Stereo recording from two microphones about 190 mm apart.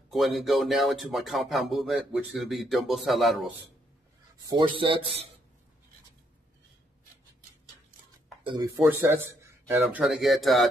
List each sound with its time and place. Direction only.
0.1 s speech: centre (ahead or behind)
4.5 s a man's voice: 25° right (ahead or behind)
8.7 s speech: 10° right (ahead or behind)